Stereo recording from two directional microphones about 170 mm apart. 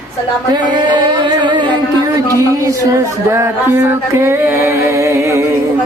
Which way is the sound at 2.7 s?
15° right (ahead or behind).